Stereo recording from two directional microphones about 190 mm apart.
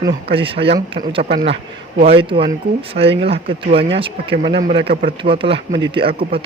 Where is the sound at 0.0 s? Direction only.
25° right (ahead or behind).